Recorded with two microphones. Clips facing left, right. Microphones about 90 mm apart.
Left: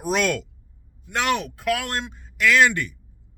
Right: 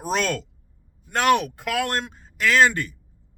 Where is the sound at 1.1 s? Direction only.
50° right (ahead or behind).